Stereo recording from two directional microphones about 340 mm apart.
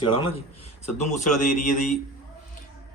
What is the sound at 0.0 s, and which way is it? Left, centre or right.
A man's voice, centre.